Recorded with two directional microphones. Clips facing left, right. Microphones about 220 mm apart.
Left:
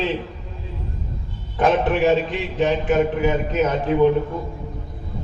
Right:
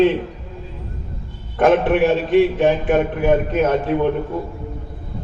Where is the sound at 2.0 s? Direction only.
55° right (ahead or behind).